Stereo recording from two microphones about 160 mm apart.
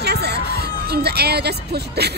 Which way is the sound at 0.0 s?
90° right.